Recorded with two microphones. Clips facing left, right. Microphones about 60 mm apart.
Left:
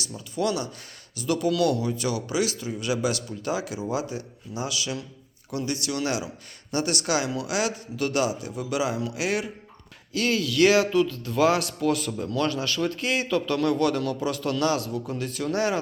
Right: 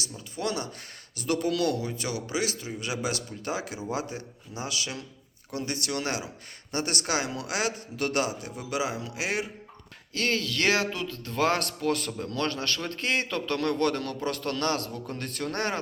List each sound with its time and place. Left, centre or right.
0.3 s a man's voice: right
10.1 s a man's voice: right